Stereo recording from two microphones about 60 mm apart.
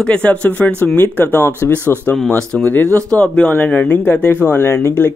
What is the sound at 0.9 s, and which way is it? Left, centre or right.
Speech, left.